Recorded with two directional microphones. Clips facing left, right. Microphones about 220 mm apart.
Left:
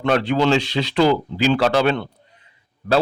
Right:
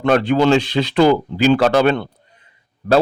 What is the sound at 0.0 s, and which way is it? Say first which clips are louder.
A man's voice: right 4 dB; 50° right (ahead or behind).